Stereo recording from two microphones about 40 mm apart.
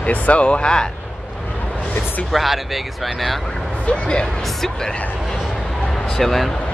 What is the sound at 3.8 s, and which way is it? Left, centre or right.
Speech, left.